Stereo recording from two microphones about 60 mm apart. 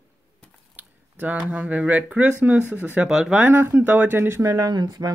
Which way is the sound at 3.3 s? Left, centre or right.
Right.